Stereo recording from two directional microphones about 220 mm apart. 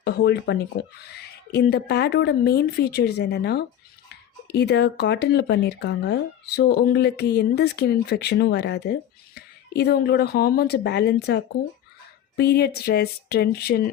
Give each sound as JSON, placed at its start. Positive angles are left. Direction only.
{"t": 0.0, "sound": "speech", "side_deg": 50}